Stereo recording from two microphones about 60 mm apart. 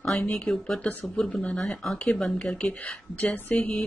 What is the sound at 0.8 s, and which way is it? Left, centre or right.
A woman's voice, left.